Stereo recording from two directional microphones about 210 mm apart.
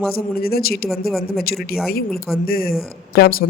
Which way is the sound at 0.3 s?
45° left (ahead or behind).